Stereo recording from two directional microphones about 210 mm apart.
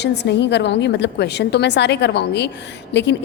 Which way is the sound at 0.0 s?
55° left (ahead or behind).